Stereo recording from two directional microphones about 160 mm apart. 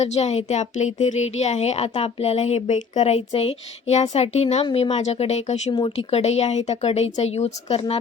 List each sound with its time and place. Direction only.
0.0 s a woman's voice: 45° left (ahead or behind)
5.7 s speech: 35° left (ahead or behind)